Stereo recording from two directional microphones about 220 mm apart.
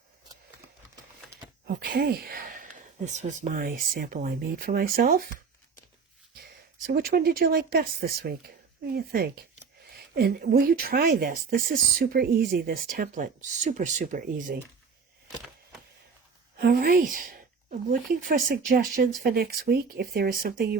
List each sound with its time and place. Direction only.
1.6 s speech: 45° right (ahead or behind)
6.8 s speech: 45° right (ahead or behind)
16.6 s speech: 40° right (ahead or behind)